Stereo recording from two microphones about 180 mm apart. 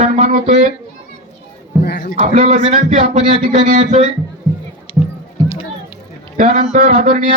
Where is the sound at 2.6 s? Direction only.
35° right (ahead or behind).